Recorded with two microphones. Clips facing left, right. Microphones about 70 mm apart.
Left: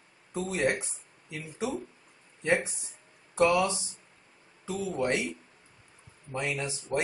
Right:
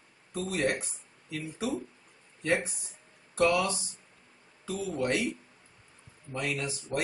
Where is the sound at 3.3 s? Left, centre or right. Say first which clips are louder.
Left 2 dB; left.